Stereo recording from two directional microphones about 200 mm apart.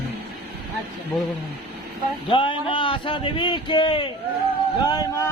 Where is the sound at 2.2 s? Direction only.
25° left (ahead or behind).